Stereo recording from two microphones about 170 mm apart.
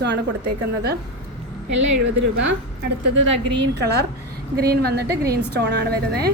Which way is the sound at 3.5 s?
90° right.